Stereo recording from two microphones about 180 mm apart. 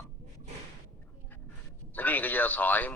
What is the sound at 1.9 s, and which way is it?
Speech, 10° left (ahead or behind).